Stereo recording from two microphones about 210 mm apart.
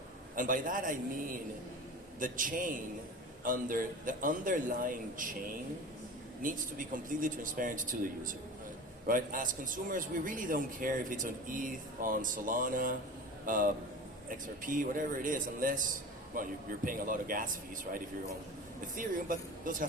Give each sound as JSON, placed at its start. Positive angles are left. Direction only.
{"t": 0.3, "sound": "a man's voice", "side_deg": -40}
{"t": 2.1, "sound": "a man's voice", "side_deg": -40}
{"t": 6.4, "sound": "a man's voice", "side_deg": -40}
{"t": 18.9, "sound": "a man's voice", "side_deg": -40}